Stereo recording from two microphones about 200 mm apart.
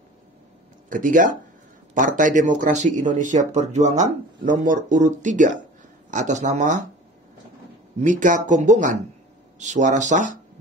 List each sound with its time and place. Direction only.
0.8 s speech: 40° right (ahead or behind)
8.0 s speech: 40° right (ahead or behind)